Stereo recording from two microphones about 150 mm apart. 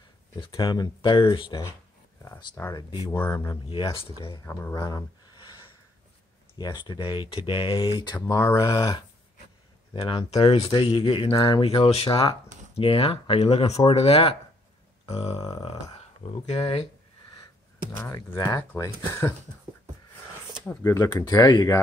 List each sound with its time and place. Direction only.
0.4 s speech: 30° left (ahead or behind)
3.2 s speech: 15° left (ahead or behind)
3.7 s speech: 35° left (ahead or behind)
4.7 s a sound: 25° left (ahead or behind)
6.6 s speech: 30° left (ahead or behind)
9.9 s speech: 35° left (ahead or behind)
15.0 s grunt: 45° left (ahead or behind)
16.2 s speech: 40° left (ahead or behind)
17.9 s speech: 20° left (ahead or behind)
20.8 s speech: 20° left (ahead or behind)